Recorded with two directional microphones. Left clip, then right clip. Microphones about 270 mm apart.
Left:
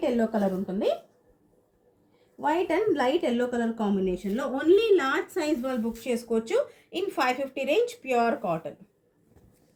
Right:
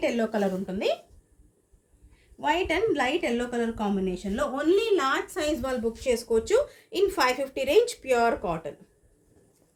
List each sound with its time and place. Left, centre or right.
0.0 s a woman's voice: right
2.4 s a woman's voice: right